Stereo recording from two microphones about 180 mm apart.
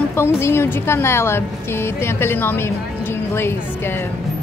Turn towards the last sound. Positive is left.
turn(degrees=15)  # may be behind; listen again after turning